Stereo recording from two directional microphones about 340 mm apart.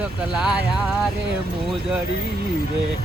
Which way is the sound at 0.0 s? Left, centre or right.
Centre.